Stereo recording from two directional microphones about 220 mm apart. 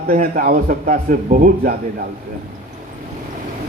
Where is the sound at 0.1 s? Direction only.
40° right (ahead or behind).